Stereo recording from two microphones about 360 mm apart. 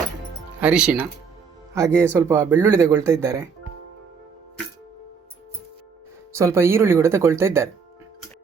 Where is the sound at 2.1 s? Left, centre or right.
Centre.